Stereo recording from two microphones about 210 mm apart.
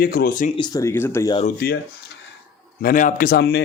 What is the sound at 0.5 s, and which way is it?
Speech, 20° left (ahead or behind).